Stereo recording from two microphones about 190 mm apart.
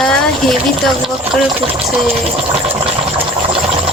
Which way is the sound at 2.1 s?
30° right (ahead or behind).